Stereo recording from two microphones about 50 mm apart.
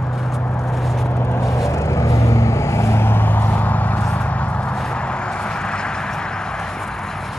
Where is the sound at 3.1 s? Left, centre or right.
Left; by 5.9 s centre.